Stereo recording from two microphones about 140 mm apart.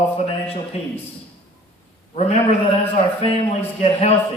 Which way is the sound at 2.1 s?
50° left (ahead or behind).